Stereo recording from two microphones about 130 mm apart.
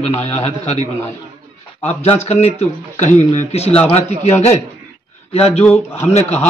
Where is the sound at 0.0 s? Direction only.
55° left (ahead or behind).